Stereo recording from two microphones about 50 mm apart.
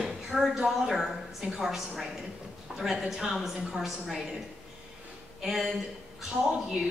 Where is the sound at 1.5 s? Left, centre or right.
Centre.